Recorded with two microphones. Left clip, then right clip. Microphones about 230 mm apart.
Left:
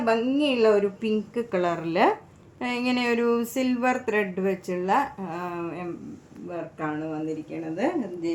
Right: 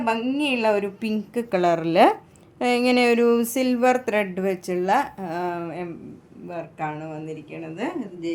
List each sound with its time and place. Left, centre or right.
0.0 s a woman's voice: right